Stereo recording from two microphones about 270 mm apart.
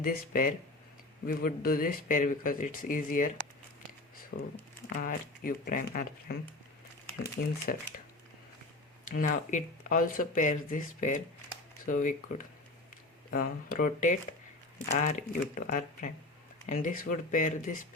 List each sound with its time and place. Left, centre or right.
0.0 s speech: left
4.3 s speech: left
9.0 s speech: left